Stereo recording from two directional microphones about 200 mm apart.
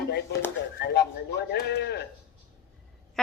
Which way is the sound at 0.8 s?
55° left (ahead or behind).